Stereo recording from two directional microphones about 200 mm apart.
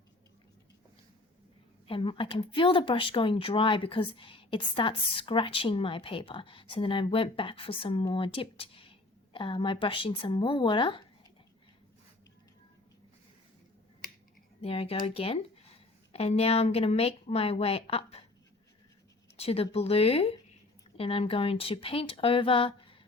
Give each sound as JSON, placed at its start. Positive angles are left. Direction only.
{"t": 1.9, "sound": "speech", "side_deg": 25}
{"t": 14.6, "sound": "speech", "side_deg": 30}
{"t": 19.4, "sound": "speech", "side_deg": 30}